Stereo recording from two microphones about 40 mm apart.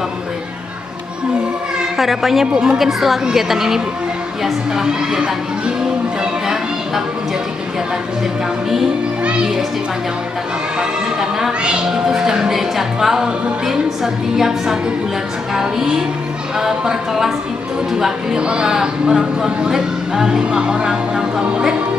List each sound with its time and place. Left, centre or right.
2.0 s music: centre
2.4 s speech: centre
2.8 s speech: centre
3.3 s music: centre
4.7 s speech: centre
9.2 s speech: right
10.8 s speech: centre
11.6 s music: right
18.4 s speech: right